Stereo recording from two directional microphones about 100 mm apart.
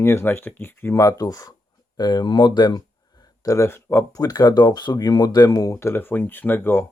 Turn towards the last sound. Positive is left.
turn(degrees=20)  # may be behind; listen again after turning